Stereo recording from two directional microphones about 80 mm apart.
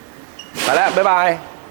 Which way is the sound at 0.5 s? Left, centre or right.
Centre.